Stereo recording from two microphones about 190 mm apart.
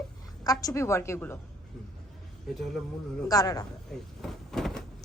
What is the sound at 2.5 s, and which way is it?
Speech, centre (ahead or behind).